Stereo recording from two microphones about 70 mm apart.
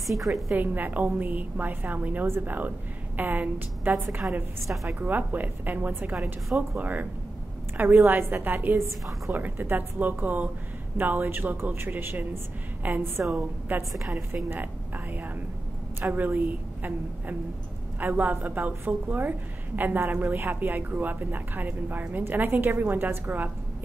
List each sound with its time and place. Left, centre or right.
0.0 s a woman's voice: centre
0.5 s a woman's voice: right
2.2 s speech: right
3.2 s a woman's voice: right
4.9 s a woman's voice: right
6.1 s a woman's voice: centre
6.8 s a woman's voice: right
13.9 s a woman's voice: centre
14.3 s a woman's voice: right